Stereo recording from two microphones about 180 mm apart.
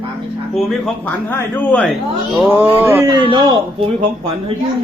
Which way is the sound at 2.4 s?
10° right (ahead or behind).